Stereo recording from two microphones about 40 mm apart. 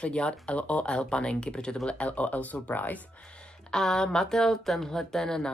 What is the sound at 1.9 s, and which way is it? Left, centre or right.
Speech, left.